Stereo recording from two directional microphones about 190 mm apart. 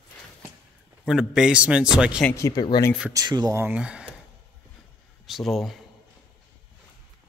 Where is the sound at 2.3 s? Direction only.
15° left (ahead or behind).